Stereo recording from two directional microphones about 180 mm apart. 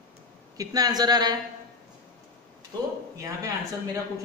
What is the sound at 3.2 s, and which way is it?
Speech, 15° right (ahead or behind).